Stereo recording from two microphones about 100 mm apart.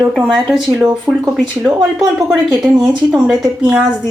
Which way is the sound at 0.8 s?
30° right (ahead or behind).